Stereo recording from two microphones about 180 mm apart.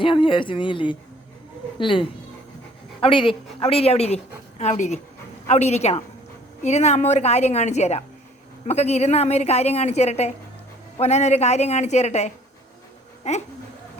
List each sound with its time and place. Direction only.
0.0 s a woman's voice: 30° left (ahead or behind)